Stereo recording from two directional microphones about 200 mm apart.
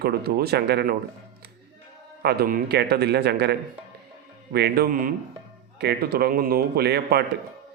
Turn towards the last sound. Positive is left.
turn(degrees=-55)  # may be behind; listen again after turning